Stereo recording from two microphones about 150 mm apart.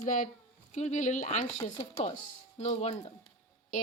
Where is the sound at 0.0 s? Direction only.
60° left (ahead or behind).